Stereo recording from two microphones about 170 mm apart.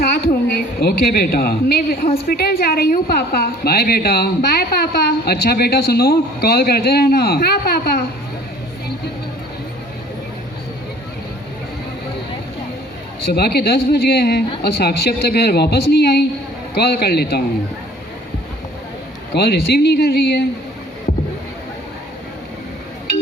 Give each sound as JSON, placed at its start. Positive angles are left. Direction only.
{"t": 0.1, "sound": "a woman's voice", "side_deg": 65}
{"t": 13.2, "sound": "speech", "side_deg": 70}
{"t": 19.3, "sound": "speech", "side_deg": 70}
{"t": 21.1, "sound": "a sound", "side_deg": 40}